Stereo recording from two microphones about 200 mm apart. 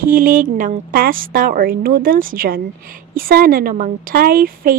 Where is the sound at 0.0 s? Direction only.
45° right (ahead or behind).